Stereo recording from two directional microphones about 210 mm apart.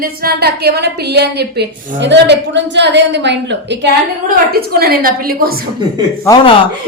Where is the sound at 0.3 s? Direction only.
50° right (ahead or behind).